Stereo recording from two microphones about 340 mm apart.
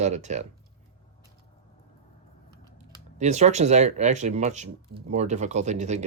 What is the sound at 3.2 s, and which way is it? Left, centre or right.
Speech, centre.